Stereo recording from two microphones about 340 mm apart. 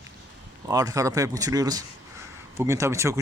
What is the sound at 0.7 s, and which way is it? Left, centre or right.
Speech, centre.